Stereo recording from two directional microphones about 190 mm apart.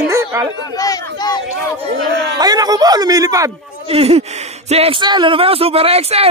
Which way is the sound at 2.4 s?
20° right (ahead or behind).